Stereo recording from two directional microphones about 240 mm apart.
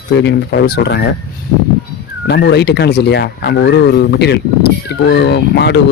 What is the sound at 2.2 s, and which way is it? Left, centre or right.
Speech, left.